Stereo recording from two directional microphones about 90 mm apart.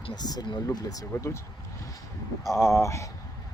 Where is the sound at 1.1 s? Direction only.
30° left (ahead or behind).